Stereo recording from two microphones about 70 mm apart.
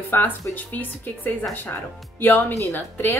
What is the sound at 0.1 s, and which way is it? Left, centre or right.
A woman's voice, left.